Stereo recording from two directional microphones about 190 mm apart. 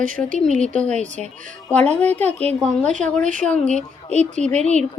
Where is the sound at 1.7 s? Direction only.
5° left (ahead or behind).